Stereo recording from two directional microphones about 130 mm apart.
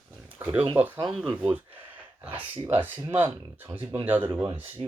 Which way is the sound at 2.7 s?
15° right (ahead or behind).